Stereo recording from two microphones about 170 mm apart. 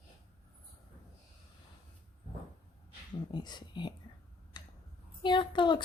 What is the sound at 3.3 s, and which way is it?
Speech, 25° left (ahead or behind).